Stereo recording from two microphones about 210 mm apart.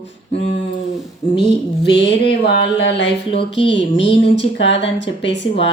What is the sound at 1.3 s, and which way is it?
Mantra, 55° left (ahead or behind).